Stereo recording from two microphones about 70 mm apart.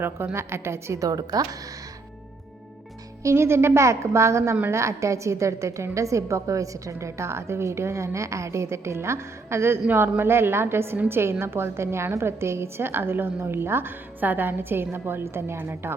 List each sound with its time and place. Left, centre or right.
0.3 s a woman's voice: right
0.9 s a woman's voice: right
3.2 s a woman's voice: right